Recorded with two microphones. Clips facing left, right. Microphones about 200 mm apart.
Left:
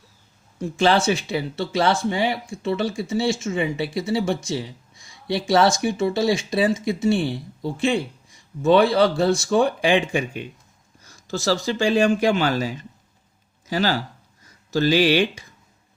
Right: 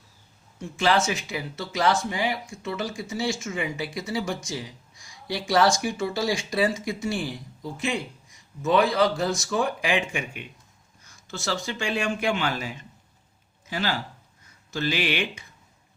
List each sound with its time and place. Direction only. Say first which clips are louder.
0.6 s speech: left 4 dB; 30° left (ahead or behind)